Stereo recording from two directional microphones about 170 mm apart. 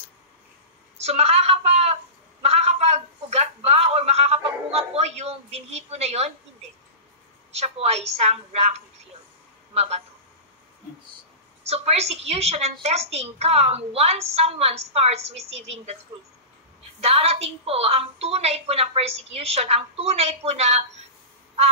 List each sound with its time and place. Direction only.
0.9 s a sound: 40° right (ahead or behind)
7.5 s a woman's voice: 40° right (ahead or behind)
11.6 s a woman's voice: 35° right (ahead or behind)
17.0 s a woman's voice: 35° right (ahead or behind)